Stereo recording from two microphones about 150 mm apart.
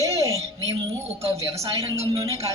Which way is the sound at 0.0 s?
20° right (ahead or behind).